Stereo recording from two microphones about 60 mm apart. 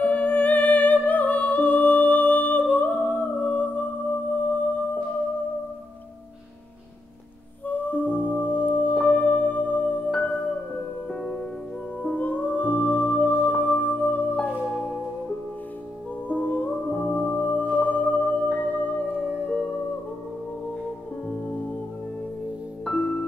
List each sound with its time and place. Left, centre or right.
0.0 s music: left
7.6 s music: left
11.1 s music: centre
12.0 s music: left
16.3 s music: left